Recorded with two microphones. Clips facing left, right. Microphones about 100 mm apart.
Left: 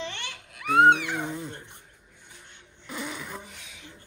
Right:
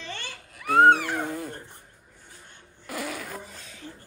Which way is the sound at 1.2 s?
20° left (ahead or behind).